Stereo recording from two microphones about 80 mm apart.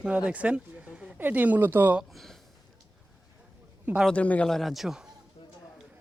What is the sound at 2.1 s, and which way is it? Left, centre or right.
Speech, centre.